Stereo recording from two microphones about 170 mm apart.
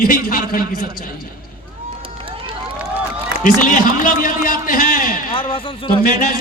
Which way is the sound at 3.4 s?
55° left (ahead or behind).